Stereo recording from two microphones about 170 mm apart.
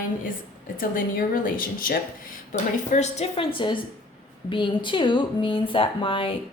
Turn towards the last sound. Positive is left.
turn(degrees=30)  # may be behind; listen again after turning